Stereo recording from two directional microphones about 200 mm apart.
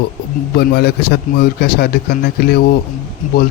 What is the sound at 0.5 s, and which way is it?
Speech, 55° left (ahead or behind).